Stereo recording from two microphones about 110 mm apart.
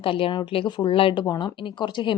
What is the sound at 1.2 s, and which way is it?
Speech, 40° left (ahead or behind).